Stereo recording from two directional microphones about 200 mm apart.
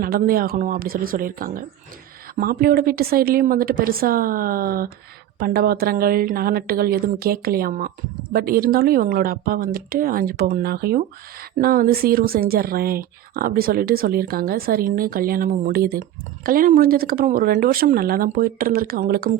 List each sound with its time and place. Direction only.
0.0 s speech: 45° right (ahead or behind)